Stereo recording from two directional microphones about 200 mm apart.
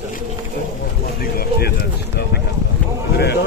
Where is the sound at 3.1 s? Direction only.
55° left (ahead or behind).